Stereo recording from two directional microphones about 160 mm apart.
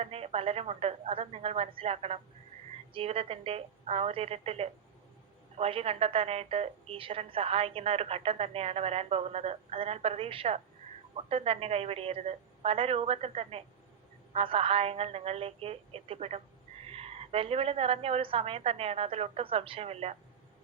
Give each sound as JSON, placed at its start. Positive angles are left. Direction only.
{"t": 0.0, "sound": "a woman's voice", "side_deg": -40}